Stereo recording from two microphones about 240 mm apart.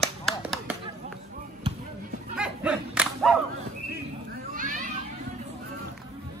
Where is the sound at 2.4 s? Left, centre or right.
Centre.